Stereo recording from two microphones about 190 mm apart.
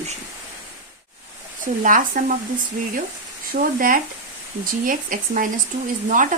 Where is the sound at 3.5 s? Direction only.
50° right (ahead or behind).